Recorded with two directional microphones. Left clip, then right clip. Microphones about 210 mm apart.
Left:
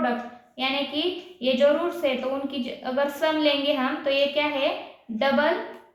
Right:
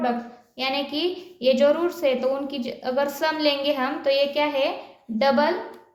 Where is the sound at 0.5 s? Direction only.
60° right (ahead or behind).